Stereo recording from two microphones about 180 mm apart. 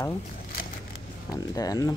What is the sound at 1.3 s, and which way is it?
Speech, 20° left (ahead or behind).